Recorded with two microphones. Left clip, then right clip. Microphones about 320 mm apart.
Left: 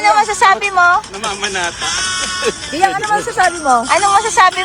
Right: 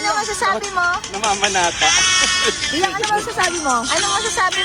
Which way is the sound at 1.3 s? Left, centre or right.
Centre.